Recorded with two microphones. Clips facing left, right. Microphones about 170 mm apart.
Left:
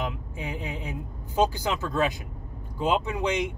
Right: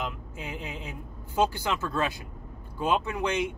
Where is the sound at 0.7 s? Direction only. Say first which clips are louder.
Left 4 dB; 15° left (ahead or behind).